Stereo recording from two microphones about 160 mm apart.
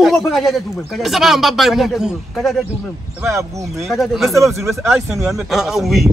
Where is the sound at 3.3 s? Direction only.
20° right (ahead or behind).